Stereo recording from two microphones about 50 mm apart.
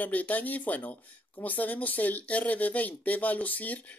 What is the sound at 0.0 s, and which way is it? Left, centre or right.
Speech, left.